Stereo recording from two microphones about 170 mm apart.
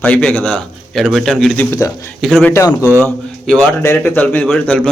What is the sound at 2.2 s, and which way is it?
Speech, centre (ahead or behind).